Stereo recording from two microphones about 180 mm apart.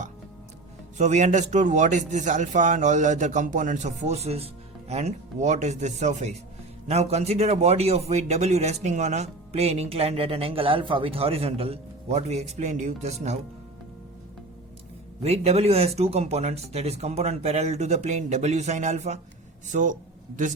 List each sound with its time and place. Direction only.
0.9 s a man's voice: 40° right (ahead or behind)
15.2 s a man's voice: 35° right (ahead or behind)